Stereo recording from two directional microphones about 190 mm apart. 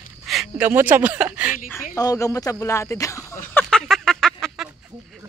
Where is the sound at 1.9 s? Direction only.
15° left (ahead or behind); by 4.7 s centre (ahead or behind).